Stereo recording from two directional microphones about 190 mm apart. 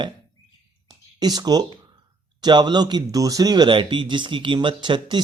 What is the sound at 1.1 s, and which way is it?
Speech, 20° right (ahead or behind).